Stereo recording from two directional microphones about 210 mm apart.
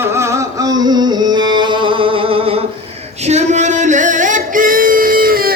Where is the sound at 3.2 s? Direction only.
35° right (ahead or behind).